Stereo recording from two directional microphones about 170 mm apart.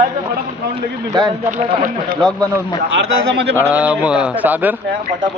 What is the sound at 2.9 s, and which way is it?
Speech, 90° right.